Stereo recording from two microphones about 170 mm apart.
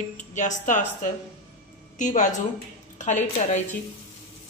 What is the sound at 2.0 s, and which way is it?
A woman's voice, 45° left (ahead or behind).